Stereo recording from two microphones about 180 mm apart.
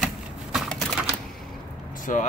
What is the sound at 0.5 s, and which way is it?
Typing, centre (ahead or behind).